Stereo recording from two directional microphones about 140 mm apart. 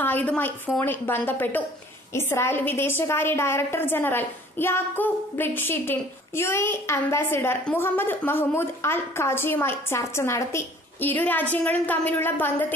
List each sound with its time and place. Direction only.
0.0 s a woman's voice: 10° left (ahead or behind)